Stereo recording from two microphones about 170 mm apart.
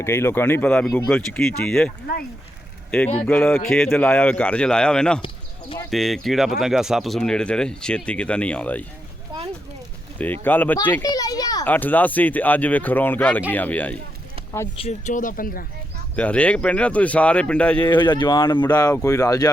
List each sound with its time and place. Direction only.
0.0 s speech: 15° left (ahead or behind)
3.2 s speech: 10° left (ahead or behind)
5.2 s a sound: 30° left (ahead or behind)
5.9 s speech: centre (ahead or behind)
10.4 s speech: 10° left (ahead or behind)
11.0 s a sound: 20° left (ahead or behind)
11.6 s speech: 10° left (ahead or behind)
14.8 s speech: 40° left (ahead or behind)
16.1 s speech: 5° left (ahead or behind)
17.8 s speech: 30° left (ahead or behind)